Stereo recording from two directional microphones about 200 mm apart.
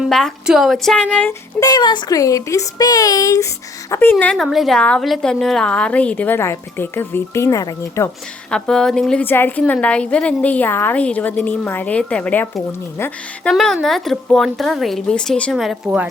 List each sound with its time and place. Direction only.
0.0 s a woman's voice: centre (ahead or behind)